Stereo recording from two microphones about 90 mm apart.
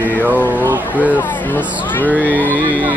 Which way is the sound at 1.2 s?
20° left (ahead or behind).